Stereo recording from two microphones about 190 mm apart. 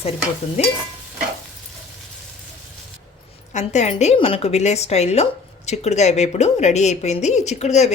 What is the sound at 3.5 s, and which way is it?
A woman's voice, 35° left (ahead or behind).